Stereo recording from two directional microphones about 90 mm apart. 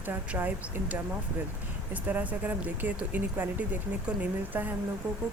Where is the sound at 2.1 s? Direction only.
20° right (ahead or behind).